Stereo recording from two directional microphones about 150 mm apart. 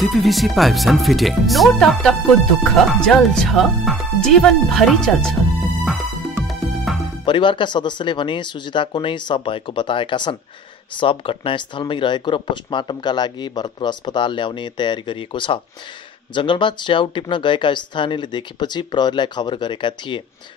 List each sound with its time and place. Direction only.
0.0 s speech: centre (ahead or behind)
6.4 s music: centre (ahead or behind)
7.2 s speech: 35° left (ahead or behind)